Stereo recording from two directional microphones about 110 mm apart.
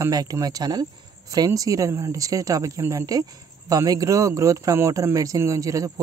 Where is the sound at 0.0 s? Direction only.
35° right (ahead or behind).